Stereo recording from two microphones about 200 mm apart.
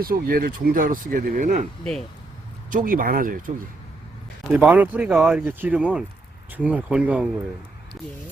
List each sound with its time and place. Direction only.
0.0 s speech: 45° right (ahead or behind)
1.8 s speech: 5° left (ahead or behind)
2.6 s speech: 40° right (ahead or behind)
4.5 s speech: 5° right (ahead or behind)